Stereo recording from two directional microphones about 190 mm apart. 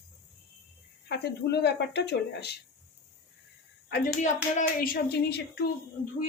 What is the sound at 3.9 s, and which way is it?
Speech, 55° left (ahead or behind).